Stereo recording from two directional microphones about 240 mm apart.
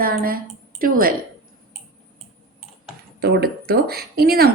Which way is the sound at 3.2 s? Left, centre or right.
Right.